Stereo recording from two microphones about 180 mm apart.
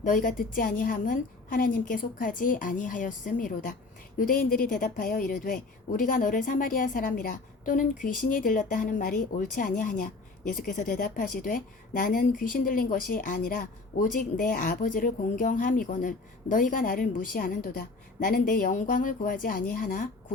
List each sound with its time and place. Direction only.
0.0 s a woman's voice: 45° left (ahead or behind)